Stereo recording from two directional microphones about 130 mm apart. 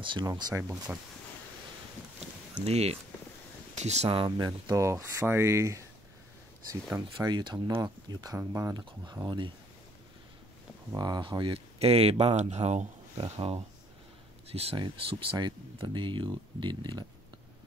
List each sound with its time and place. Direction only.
0.0 s speech: 40° right (ahead or behind)
0.9 s speech: 15° right (ahead or behind)
2.6 s speech: 55° right (ahead or behind)
4.1 s speech: 40° right (ahead or behind)
4.6 s speech: 25° right (ahead or behind)
7.2 s speech: 35° right (ahead or behind)
11.0 s speech: 35° right (ahead or behind)